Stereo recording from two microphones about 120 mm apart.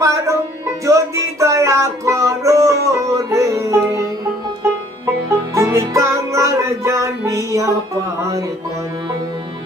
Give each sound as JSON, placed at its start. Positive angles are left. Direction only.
{"t": 0.0, "sound": "music", "side_deg": -25}
{"t": 5.5, "sound": "music", "side_deg": -25}